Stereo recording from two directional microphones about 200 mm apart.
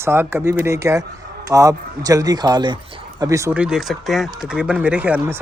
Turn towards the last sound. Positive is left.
turn(degrees=-10)  # may be behind; listen again after turning